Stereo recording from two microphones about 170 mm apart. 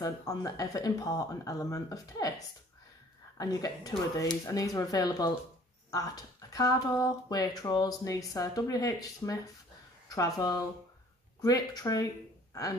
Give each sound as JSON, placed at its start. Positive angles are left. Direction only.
{"t": 0.0, "sound": "speech", "side_deg": 20}